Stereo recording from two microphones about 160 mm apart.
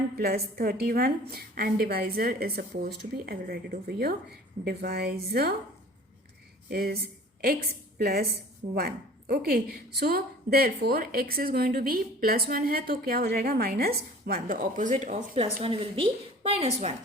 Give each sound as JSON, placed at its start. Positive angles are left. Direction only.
{"t": 0.2, "sound": "a woman's voice", "side_deg": -75}
{"t": 6.7, "sound": "a woman's voice", "side_deg": -70}
{"t": 15.6, "sound": "a woman's voice", "side_deg": -35}